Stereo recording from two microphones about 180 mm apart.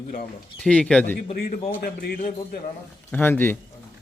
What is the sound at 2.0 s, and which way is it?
Speech, 60° left (ahead or behind).